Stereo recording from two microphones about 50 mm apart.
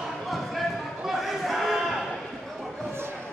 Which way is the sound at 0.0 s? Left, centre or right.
Centre.